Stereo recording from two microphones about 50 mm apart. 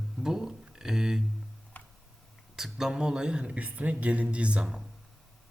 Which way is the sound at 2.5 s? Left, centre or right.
Centre.